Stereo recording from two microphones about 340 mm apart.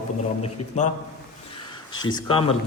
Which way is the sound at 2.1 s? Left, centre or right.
Centre.